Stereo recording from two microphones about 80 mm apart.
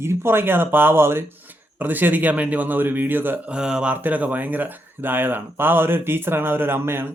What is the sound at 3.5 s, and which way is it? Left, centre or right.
A man's voice, centre.